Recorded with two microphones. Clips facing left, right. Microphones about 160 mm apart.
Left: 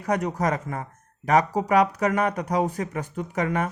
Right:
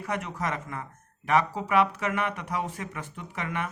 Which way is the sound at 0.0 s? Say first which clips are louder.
Left 7 dB; 40° left (ahead or behind).